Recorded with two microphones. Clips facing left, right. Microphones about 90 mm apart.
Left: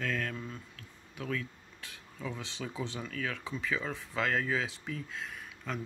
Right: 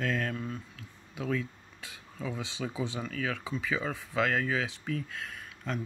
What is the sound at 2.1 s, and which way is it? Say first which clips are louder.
Speech: right 3 dB; 5° right (ahead or behind).